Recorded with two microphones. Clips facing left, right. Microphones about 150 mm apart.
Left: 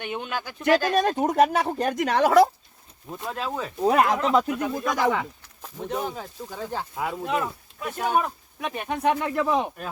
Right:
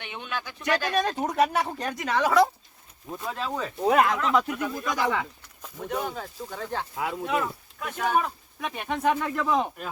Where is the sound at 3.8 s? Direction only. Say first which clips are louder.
Left 2 dB; 25° left (ahead or behind).